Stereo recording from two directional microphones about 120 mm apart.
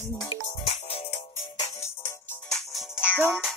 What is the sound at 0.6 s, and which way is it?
Music, 55° left (ahead or behind).